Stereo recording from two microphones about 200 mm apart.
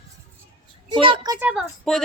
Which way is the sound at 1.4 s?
5° right (ahead or behind).